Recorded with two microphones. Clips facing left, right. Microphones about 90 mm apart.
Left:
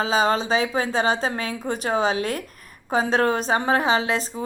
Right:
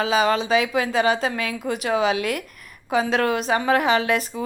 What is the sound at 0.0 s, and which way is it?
A woman's voice, 35° left (ahead or behind).